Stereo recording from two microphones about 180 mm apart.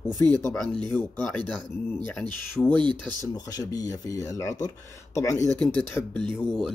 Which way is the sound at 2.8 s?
25° right (ahead or behind).